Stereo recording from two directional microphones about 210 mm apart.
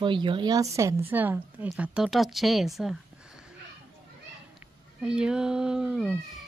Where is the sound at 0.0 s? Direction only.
25° right (ahead or behind); by 3.0 s centre (ahead or behind).